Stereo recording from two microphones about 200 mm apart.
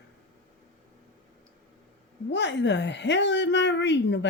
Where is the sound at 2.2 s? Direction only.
60° left (ahead or behind).